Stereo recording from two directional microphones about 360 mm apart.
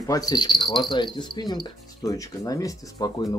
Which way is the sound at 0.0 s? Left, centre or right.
Centre.